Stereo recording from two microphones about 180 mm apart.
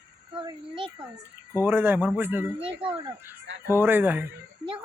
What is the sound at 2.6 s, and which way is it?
Speech, 30° right (ahead or behind).